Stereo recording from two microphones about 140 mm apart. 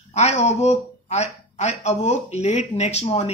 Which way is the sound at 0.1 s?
55° left (ahead or behind).